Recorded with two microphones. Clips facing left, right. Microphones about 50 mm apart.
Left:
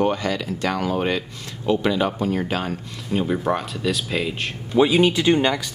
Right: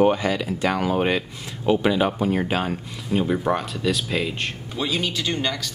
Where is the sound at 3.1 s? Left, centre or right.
Centre.